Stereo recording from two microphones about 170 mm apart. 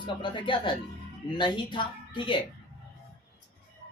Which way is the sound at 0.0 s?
30° left (ahead or behind).